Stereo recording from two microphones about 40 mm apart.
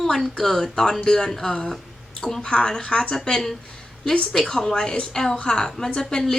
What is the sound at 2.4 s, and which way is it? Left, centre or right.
Speech, left.